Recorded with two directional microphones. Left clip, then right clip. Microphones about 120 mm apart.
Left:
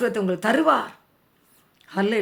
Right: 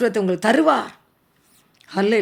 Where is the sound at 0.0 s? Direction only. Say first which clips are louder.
Right 4 dB; 30° right (ahead or behind).